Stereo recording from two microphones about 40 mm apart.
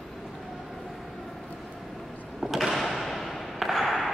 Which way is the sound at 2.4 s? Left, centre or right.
Centre.